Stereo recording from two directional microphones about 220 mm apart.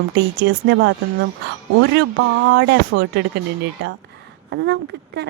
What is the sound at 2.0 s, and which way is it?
Speech, 55° right (ahead or behind).